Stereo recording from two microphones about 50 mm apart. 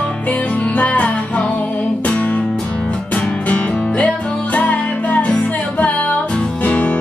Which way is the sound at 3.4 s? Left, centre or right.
Left.